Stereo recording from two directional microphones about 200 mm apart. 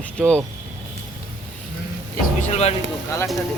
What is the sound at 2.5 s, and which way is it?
Speech, 30° left (ahead or behind).